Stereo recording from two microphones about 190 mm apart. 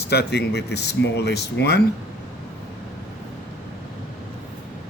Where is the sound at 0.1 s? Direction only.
60° left (ahead or behind).